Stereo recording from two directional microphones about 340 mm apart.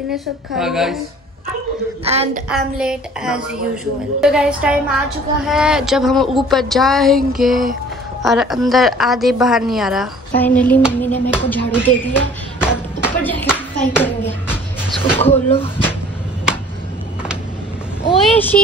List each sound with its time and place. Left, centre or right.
0.6 s a woman's voice: centre
2.1 s a woman's voice: centre
2.5 s a woman's voice: centre
18.0 s a child's voice: centre